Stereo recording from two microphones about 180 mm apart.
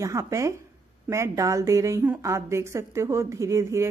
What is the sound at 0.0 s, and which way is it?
Speech, 15° right (ahead or behind).